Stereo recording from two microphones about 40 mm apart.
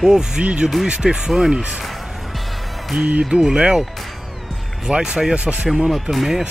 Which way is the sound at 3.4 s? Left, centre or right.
Centre.